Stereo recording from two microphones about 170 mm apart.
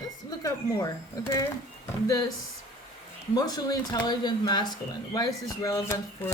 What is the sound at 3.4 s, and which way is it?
Speech, 20° left (ahead or behind).